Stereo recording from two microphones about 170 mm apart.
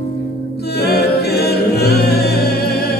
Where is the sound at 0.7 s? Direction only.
70° left (ahead or behind).